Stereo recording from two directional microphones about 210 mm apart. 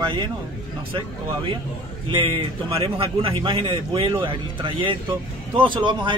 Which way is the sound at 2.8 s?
25° right (ahead or behind).